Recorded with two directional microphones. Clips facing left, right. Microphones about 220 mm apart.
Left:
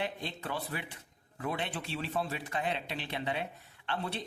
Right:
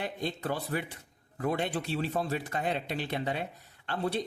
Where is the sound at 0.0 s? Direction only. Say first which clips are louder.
Right 3 dB; 40° right (ahead or behind).